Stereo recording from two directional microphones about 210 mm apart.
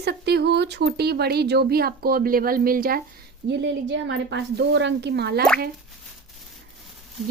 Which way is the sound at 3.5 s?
55° right (ahead or behind).